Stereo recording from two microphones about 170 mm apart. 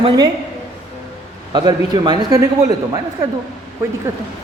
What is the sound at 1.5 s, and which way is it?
Speech, 25° right (ahead or behind).